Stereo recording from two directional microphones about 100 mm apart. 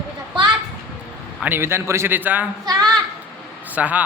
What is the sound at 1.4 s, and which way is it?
A man's voice, 25° right (ahead or behind).